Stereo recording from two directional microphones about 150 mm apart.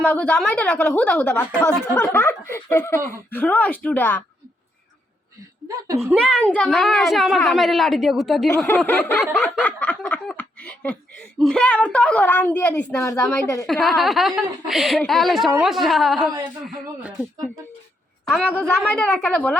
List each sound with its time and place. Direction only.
0.0 s speech: 10° left (ahead or behind)
1.9 s speech: 20° left (ahead or behind)
5.6 s a woman's voice: 25° right (ahead or behind)
6.1 s a child's voice: 5° left (ahead or behind)
8.4 s speech: 15° left (ahead or behind)
13.7 s a child's voice: centre (ahead or behind)
18.5 s speech: 10° left (ahead or behind)